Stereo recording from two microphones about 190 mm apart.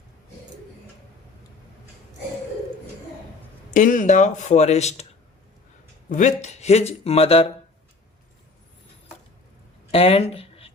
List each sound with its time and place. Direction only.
3.8 s speech: 45° left (ahead or behind)
6.1 s speech: 40° left (ahead or behind)
9.9 s speech: 30° left (ahead or behind)